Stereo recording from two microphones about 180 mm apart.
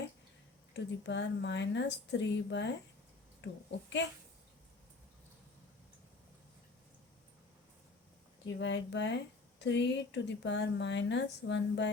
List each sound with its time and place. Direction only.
0.7 s a child's voice: 75° left (ahead or behind)
8.4 s speech: 80° left